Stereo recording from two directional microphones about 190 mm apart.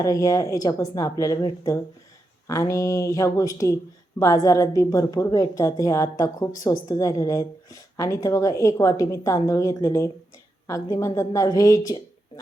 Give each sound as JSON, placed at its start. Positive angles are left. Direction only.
{"t": 0.0, "sound": "a woman's voice", "side_deg": 20}